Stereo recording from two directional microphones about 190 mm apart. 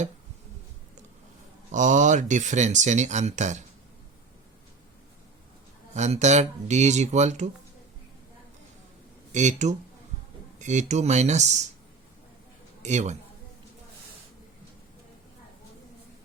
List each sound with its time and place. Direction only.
1.7 s speech: 40° right (ahead or behind)
5.9 s speech: 35° right (ahead or behind)
9.3 s speech: 40° right (ahead or behind)
12.8 s a man's voice: 35° right (ahead or behind)